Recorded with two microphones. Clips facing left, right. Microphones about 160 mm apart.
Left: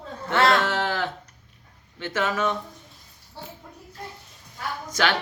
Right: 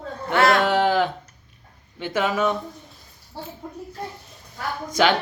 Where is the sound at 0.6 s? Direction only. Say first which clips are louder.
Right 6 dB; 15° right (ahead or behind).